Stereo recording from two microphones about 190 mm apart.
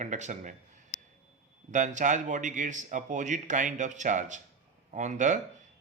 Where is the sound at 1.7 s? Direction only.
40° right (ahead or behind).